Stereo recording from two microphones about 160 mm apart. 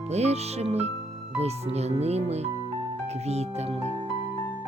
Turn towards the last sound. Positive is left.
turn(degrees=-40)  # may be behind; listen again after turning